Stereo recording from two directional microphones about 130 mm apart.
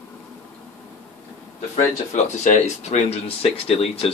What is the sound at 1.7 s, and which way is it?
Speech, 70° left (ahead or behind).